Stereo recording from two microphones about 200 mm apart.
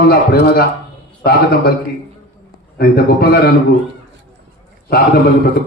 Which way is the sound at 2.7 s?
50° left (ahead or behind).